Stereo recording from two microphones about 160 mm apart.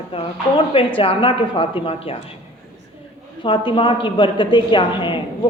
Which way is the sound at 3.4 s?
30° left (ahead or behind).